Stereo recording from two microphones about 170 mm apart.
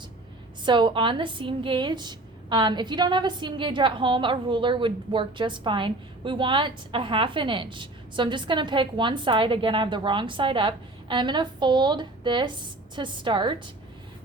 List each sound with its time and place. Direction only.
0.6 s a woman's voice: 30° right (ahead or behind)